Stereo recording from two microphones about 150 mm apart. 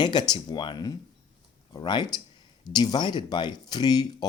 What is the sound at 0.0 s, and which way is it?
Speech, 30° left (ahead or behind).